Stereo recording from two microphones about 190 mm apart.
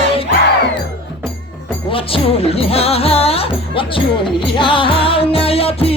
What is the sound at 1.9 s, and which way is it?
Music, 30° left (ahead or behind).